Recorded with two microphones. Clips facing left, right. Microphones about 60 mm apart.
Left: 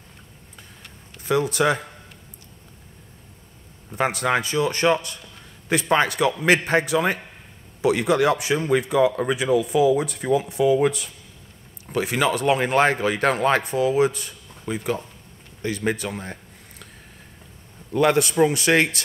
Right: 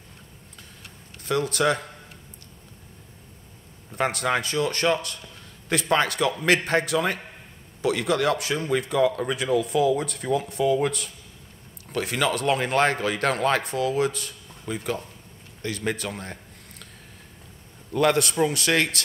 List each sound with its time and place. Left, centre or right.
1.2 s speech: centre
3.9 s speech: centre
15.6 s a sound: centre
17.9 s speech: centre